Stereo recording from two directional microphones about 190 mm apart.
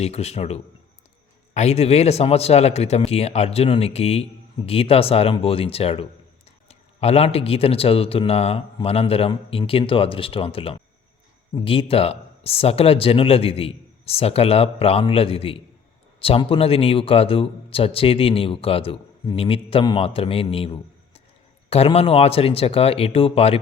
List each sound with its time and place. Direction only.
0.0 s speech: 35° left (ahead or behind)